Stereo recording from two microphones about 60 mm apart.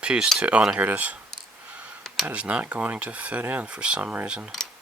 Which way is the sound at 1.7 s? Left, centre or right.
Right.